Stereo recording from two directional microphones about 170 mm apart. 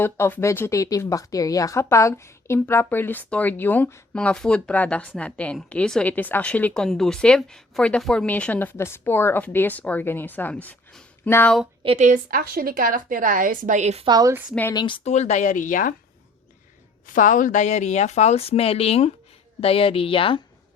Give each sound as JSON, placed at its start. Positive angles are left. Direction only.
{"t": 0.0, "sound": "speech", "side_deg": 10}
{"t": 11.9, "sound": "a woman's voice", "side_deg": -50}
{"t": 14.1, "sound": "a woman's voice", "side_deg": -20}
{"t": 14.7, "sound": "speech", "side_deg": 25}
{"t": 15.1, "sound": "speech", "side_deg": 40}
{"t": 17.1, "sound": "speech", "side_deg": 50}